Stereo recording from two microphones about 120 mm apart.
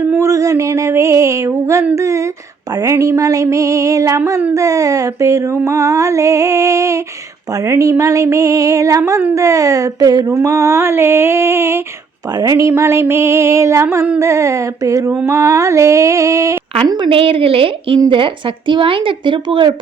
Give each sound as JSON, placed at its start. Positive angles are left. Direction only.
{"t": 0.0, "sound": "a sound", "side_deg": -20}
{"t": 2.0, "sound": "speech", "side_deg": -25}
{"t": 16.7, "sound": "speech", "side_deg": -40}